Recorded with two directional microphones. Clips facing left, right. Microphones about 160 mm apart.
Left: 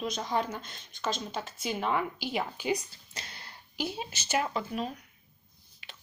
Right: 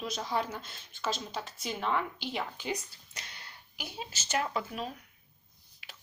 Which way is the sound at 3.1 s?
30° left (ahead or behind).